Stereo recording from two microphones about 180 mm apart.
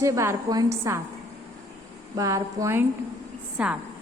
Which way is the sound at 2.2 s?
20° right (ahead or behind).